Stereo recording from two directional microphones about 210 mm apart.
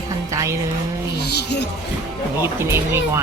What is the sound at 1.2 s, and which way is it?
Speech, 50° left (ahead or behind).